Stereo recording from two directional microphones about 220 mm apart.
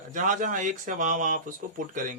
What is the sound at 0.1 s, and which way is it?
Speech, 35° right (ahead or behind).